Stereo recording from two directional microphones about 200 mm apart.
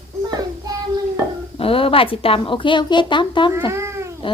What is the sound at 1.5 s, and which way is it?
A woman's voice, 25° left (ahead or behind).